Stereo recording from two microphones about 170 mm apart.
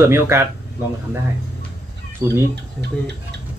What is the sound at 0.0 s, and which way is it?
Speech, 15° right (ahead or behind).